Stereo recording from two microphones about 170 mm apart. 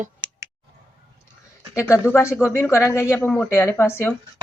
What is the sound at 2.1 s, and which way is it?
Speech, 15° left (ahead or behind).